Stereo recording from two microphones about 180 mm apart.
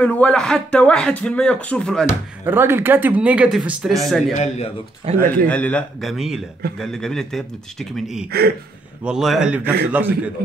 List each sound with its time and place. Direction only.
0.0 s speech: 5° left (ahead or behind)
2.4 s speech: 10° right (ahead or behind)
4.4 s speech: 35° left (ahead or behind)
5.1 s a man's voice: 35° right (ahead or behind)
5.5 s a man's voice: 10° left (ahead or behind)
8.3 s speech: 60° right (ahead or behind)
9.0 s a man's voice: 5° right (ahead or behind)